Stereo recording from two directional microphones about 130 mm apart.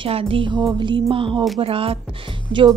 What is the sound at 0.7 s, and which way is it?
Music, 40° right (ahead or behind).